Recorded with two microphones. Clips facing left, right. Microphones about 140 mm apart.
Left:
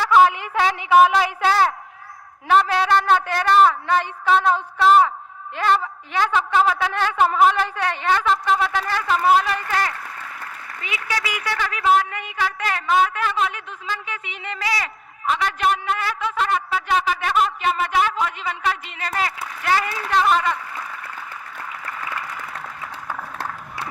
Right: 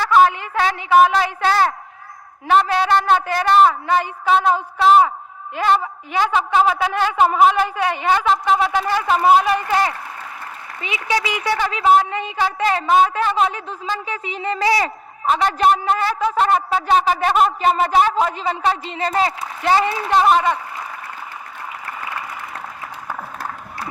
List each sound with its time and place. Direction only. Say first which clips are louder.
0.0 s a woman's voice: right 1 dB; 15° left (ahead or behind); by 20.6 s 25° right (ahead or behind)